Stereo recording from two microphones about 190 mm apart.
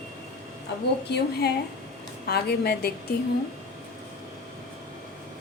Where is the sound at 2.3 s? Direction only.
55° left (ahead or behind).